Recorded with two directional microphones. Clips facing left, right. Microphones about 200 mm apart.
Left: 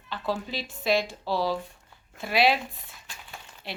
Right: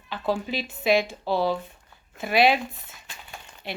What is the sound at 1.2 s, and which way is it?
Speech, 25° right (ahead or behind).